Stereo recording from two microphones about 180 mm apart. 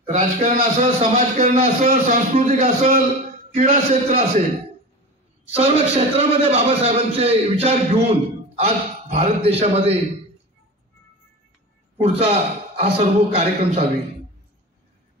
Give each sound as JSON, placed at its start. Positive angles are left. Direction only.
{"t": 0.0, "sound": "a man's voice", "side_deg": -35}
{"t": 5.6, "sound": "a man's voice", "side_deg": -35}
{"t": 12.0, "sound": "a man's voice", "side_deg": -35}